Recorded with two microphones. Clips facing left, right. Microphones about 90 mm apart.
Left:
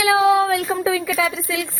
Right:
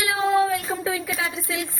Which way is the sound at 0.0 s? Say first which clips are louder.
Left 5 dB; 90° left.